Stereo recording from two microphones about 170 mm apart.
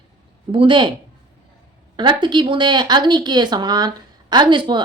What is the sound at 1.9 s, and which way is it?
A woman's voice, 25° right (ahead or behind).